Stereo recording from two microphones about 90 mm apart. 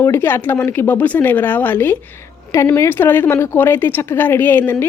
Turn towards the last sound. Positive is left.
turn(degrees=25)  # may be behind; listen again after turning